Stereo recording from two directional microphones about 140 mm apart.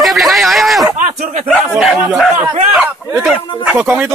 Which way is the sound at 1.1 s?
55° right (ahead or behind).